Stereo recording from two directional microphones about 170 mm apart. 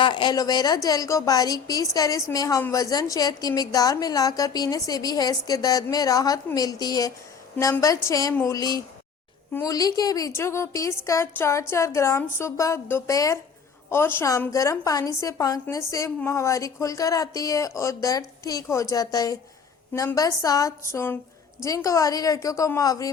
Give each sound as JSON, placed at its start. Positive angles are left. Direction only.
{"t": 0.0, "sound": "a woman's voice", "side_deg": 30}